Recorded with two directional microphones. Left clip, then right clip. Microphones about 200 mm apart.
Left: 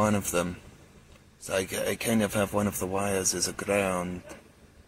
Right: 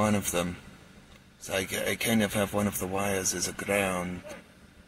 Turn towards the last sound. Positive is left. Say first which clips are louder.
# left 1 dB
turn(degrees=5)  # may be behind; listen again after turning